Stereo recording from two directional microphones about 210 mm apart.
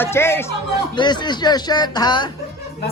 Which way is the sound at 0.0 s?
10° left (ahead or behind).